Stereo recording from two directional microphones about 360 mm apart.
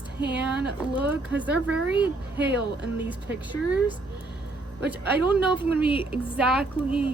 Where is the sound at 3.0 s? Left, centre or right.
Centre.